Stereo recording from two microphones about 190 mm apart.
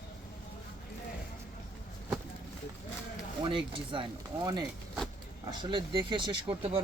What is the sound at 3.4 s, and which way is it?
Speech, 25° right (ahead or behind).